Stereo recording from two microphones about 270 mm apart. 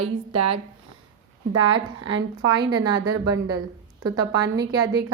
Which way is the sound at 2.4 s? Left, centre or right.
Centre.